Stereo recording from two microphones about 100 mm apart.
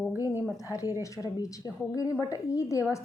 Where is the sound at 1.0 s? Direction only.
35° left (ahead or behind).